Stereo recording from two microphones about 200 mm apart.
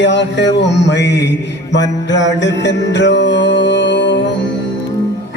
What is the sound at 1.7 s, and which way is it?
Music, 60° left (ahead or behind).